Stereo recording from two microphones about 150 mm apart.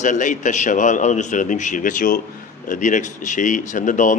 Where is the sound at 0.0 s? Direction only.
55° left (ahead or behind).